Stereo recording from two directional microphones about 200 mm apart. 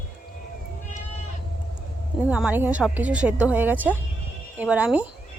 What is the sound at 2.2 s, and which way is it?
Speech, 5° right (ahead or behind).